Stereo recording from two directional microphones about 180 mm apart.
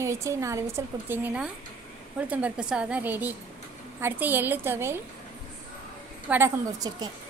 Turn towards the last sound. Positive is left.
turn(degrees=-20)  # may be behind; listen again after turning